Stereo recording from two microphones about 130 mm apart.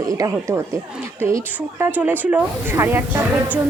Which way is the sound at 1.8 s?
15° right (ahead or behind).